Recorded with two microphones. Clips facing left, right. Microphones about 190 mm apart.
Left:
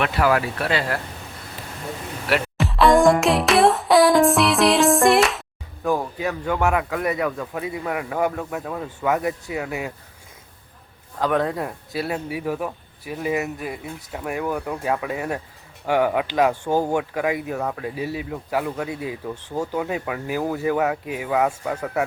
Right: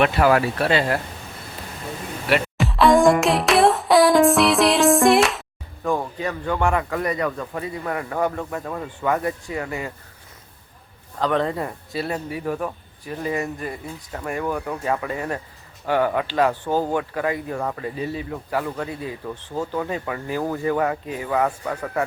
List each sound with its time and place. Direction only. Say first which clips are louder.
0.0 s speech: right 3 dB; 30° right (ahead or behind)
2.2 s speech: right 1 dB; centre (ahead or behind)
11.2 s speech: even; 5° left (ahead or behind)